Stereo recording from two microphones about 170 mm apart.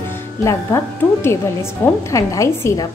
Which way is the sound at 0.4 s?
20° left (ahead or behind).